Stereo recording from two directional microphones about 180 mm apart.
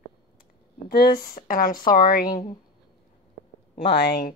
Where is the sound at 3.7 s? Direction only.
65° left (ahead or behind).